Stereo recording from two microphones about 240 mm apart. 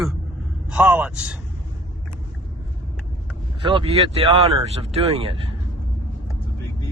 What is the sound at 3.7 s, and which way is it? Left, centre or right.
Speech, right.